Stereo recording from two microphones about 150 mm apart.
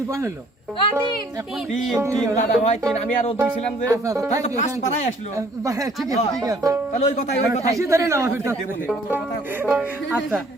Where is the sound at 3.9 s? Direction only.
20° right (ahead or behind).